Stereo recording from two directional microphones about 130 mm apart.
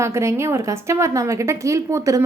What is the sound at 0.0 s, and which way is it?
A woman's voice, 20° right (ahead or behind).